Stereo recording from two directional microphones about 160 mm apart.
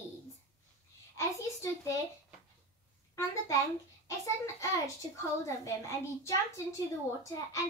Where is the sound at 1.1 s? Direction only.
20° left (ahead or behind).